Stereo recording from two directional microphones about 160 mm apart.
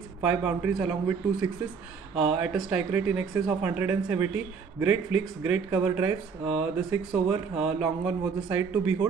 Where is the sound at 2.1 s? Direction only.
5° right (ahead or behind).